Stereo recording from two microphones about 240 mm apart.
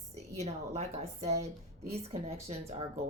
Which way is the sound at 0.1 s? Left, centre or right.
Right.